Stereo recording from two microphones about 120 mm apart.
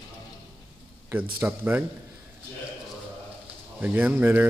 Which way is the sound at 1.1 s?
15° right (ahead or behind).